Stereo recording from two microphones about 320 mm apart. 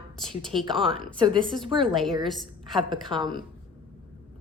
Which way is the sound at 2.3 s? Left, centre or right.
Centre.